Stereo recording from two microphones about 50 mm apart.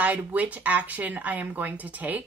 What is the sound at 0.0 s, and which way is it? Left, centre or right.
Speech, right.